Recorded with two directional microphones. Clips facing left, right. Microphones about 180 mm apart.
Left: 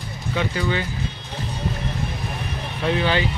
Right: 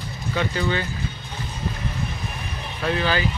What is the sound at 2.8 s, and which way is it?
Speech, 20° left (ahead or behind).